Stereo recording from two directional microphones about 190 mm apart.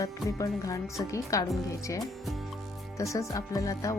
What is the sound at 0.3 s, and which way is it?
Speech, 15° left (ahead or behind).